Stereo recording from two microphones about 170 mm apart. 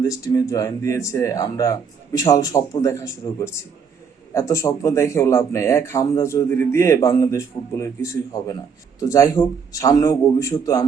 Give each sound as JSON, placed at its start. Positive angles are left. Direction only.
{"t": 0.0, "sound": "speech", "side_deg": 20}